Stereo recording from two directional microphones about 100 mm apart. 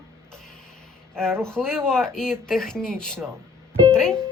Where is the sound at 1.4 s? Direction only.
5° left (ahead or behind).